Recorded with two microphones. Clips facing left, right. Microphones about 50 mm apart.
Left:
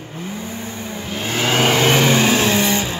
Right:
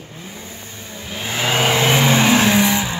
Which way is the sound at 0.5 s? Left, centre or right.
Left.